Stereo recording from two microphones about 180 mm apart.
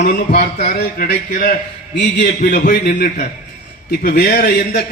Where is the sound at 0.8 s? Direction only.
60° left (ahead or behind).